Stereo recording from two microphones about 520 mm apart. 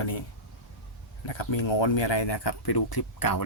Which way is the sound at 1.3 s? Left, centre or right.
Left.